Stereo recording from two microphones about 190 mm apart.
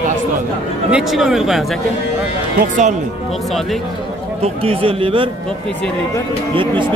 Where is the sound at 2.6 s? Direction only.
40° right (ahead or behind).